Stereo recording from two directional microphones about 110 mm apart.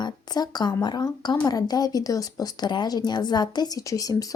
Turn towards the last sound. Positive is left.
turn(degrees=35)  # may be behind; listen again after turning